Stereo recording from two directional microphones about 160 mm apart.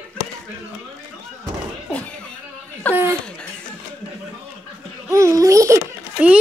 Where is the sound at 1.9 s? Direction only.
10° left (ahead or behind).